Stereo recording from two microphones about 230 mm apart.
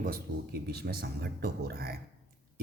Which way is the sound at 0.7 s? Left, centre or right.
Right.